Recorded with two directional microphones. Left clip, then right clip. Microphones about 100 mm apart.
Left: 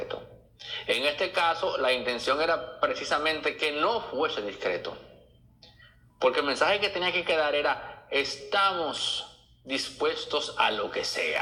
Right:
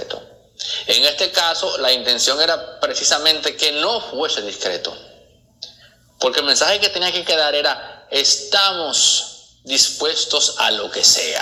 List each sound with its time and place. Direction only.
0.0 s a sound: 20° right (ahead or behind)
0.9 s a man's voice: 20° right (ahead or behind)
6.2 s a man's voice: 20° right (ahead or behind)